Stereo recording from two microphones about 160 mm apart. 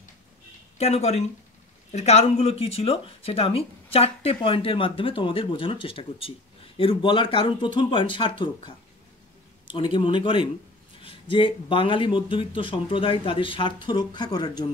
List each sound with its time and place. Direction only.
0.7 s a man's voice: 40° left (ahead or behind); by 14.7 s 25° left (ahead or behind)